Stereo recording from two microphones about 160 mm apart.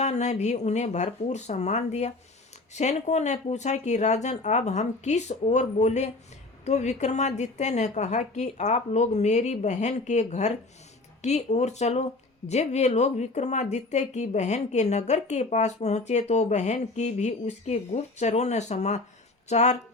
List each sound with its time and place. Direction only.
0.0 s speech: 45° left (ahead or behind)